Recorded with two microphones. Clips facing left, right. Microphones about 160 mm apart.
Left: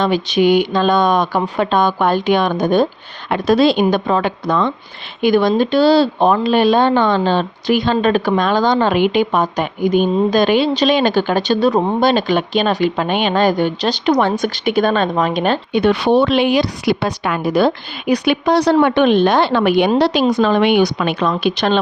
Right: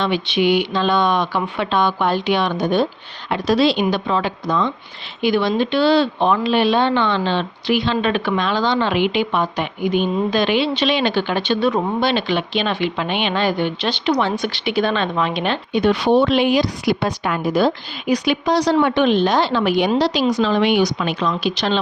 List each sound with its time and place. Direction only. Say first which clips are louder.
0.0 s speech: left 4 dB; 40° left (ahead or behind); by 4.7 s 60° left (ahead or behind)
5.2 s speech: left 4 dB; 45° left (ahead or behind)
15.7 s a woman's voice: left 1 dB; 65° left (ahead or behind)